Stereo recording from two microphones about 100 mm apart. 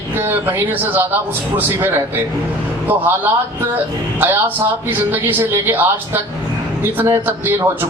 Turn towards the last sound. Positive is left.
turn(degrees=-20)  # may be behind; listen again after turning